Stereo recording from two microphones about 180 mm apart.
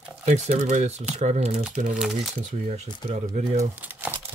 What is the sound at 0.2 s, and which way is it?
Speech, 45° right (ahead or behind).